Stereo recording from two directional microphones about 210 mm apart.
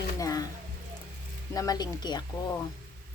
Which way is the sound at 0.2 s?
15° left (ahead or behind).